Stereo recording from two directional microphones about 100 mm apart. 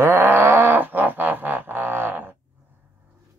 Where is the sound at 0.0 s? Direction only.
20° right (ahead or behind).